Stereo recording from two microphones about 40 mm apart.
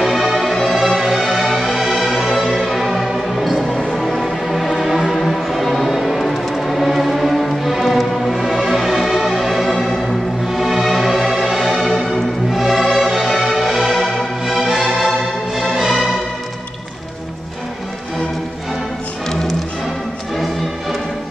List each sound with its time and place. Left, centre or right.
0.0 s music: centre
13.9 s music: centre
14.4 s music: centre